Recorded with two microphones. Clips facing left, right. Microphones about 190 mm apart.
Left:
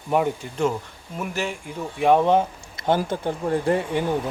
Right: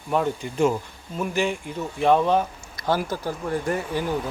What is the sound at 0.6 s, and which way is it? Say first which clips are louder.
Speech: right 2 dB; 10° right (ahead or behind).